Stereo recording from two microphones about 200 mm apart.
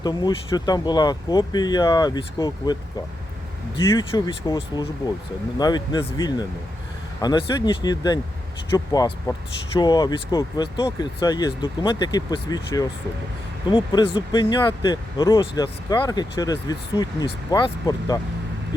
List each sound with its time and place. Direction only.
0.0 s speech: 20° left (ahead or behind)
3.9 s speech: 20° left (ahead or behind)